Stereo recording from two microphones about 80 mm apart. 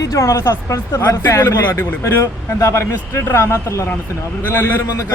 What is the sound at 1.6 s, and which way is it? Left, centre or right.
A man's voice, left.